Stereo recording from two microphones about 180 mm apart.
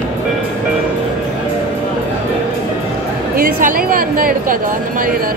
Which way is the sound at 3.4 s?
55° right (ahead or behind).